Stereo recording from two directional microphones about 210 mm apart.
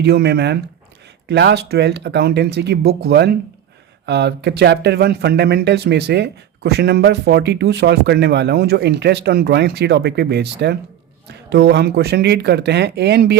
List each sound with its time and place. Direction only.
0.0 s speech: 50° right (ahead or behind)